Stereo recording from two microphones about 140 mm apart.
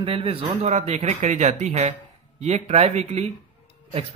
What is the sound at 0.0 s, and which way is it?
Speech, 40° right (ahead or behind).